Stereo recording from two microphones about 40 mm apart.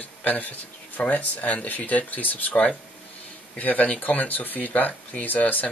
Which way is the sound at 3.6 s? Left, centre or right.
Left.